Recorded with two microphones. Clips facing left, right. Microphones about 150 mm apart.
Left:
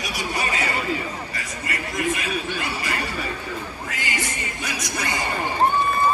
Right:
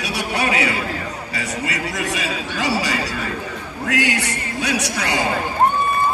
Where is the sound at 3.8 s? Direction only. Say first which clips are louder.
Right 12 dB; 75° right (ahead or behind).